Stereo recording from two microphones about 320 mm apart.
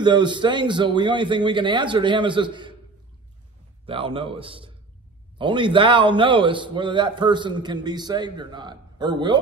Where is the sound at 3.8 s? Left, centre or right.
Centre.